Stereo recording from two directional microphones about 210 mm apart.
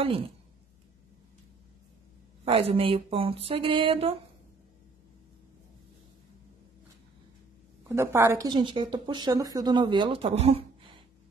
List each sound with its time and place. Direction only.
2.4 s speech: 25° right (ahead or behind)
7.9 s speech: 15° right (ahead or behind); by 11.0 s 30° right (ahead or behind)